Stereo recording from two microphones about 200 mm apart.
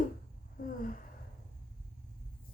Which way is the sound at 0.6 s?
45° left (ahead or behind).